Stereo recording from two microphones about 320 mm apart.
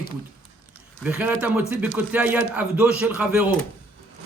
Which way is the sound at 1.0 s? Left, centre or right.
Centre.